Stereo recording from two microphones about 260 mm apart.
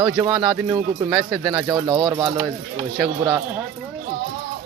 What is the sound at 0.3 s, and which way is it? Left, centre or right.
Speech, centre.